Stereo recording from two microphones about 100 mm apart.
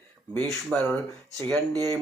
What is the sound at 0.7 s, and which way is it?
Speech, 15° left (ahead or behind).